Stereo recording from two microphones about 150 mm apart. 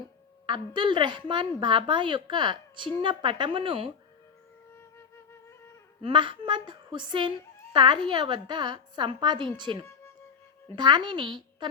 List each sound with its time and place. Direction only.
0.4 s a woman's voice: 30° right (ahead or behind)
6.0 s a woman's voice: 35° right (ahead or behind)